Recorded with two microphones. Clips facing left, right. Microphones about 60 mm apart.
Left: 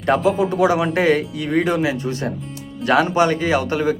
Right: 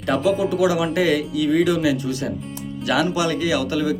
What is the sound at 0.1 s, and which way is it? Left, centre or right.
Speech, left.